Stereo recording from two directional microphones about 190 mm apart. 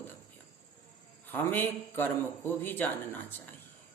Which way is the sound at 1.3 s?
10° left (ahead or behind).